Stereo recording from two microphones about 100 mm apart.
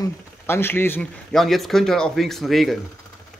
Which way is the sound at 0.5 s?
25° left (ahead or behind).